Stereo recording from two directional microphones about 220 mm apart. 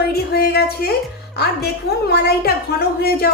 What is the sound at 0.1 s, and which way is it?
A woman's voice, 45° left (ahead or behind).